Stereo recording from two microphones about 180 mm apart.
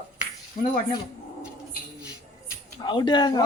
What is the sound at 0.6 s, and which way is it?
Speech, 40° left (ahead or behind).